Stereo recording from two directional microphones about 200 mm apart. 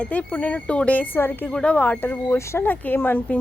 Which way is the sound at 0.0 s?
5° left (ahead or behind).